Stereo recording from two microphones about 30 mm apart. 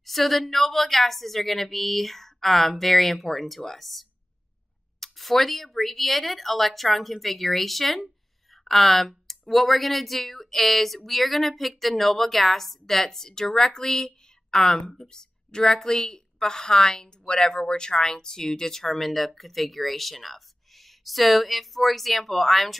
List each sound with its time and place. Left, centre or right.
0.0 s a woman's voice: centre